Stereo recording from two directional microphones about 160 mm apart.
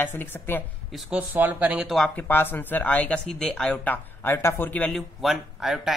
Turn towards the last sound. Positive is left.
turn(degrees=0)  # may be behind; listen again after turning